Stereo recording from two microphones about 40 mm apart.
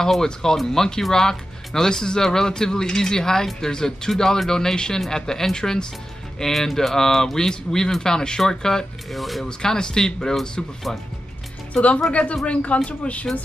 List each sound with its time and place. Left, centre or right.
0.0 s speech: centre
9.1 s speech: centre
9.4 s speech: centre
11.7 s speech: left